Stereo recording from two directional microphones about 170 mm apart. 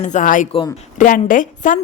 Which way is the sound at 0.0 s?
45° left (ahead or behind).